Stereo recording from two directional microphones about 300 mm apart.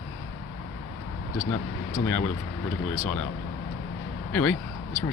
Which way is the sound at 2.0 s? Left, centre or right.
Centre.